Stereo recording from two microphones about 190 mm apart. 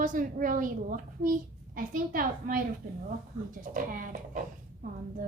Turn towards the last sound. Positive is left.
turn(degrees=-45)  # may be behind; listen again after turning